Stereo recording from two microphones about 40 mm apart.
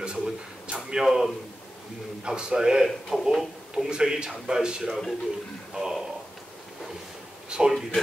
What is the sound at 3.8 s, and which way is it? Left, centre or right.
A man's voice, right.